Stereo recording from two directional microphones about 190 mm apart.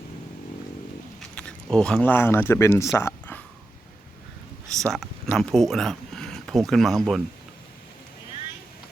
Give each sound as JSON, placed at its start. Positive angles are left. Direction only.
{"t": 1.2, "sound": "speech", "side_deg": 5}
{"t": 4.9, "sound": "speech", "side_deg": 0}